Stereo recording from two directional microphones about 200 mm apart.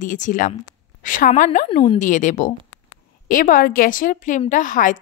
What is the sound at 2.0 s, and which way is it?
A woman's voice, 40° left (ahead or behind).